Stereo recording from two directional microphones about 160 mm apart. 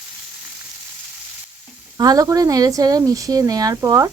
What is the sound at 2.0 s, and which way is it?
Speech, 20° right (ahead or behind).